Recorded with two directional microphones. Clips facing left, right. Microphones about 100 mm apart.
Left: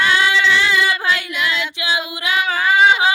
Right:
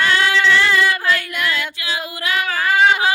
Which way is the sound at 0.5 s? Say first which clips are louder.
Right 1 dB; 45° right (ahead or behind).